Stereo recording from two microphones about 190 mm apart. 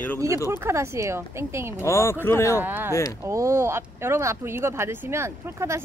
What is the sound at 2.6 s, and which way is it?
Speech, 10° right (ahead or behind).